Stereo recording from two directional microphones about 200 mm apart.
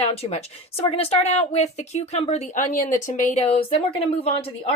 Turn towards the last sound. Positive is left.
turn(degrees=30)  # may be behind; listen again after turning